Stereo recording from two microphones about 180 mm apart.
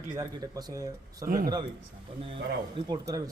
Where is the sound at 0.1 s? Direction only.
20° right (ahead or behind).